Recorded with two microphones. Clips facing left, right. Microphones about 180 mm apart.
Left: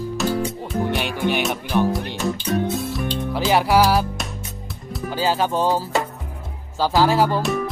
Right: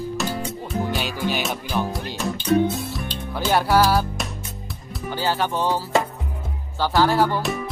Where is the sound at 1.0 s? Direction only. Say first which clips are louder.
Left 3 dB; 60° left (ahead or behind).